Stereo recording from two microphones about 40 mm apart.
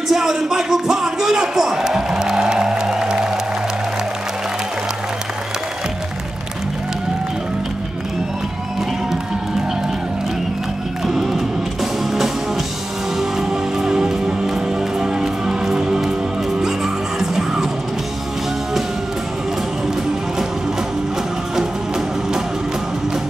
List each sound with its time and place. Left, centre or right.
0.1 s a man's voice: centre
2.5 s music: centre
11.1 s music: centre
21.5 s music: centre